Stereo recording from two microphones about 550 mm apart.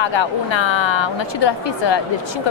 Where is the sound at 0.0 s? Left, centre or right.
Left.